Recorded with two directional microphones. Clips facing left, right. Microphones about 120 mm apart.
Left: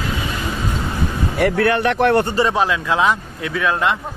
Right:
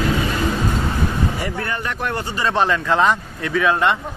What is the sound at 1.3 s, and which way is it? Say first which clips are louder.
Speech: left 9 dB; 65° left (ahead or behind).